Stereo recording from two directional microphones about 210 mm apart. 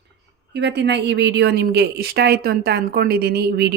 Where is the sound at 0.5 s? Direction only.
55° right (ahead or behind).